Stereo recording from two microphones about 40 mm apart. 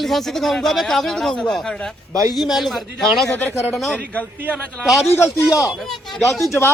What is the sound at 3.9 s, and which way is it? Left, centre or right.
Speech, left.